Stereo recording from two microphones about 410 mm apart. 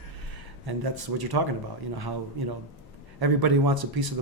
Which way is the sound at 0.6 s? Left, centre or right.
Right.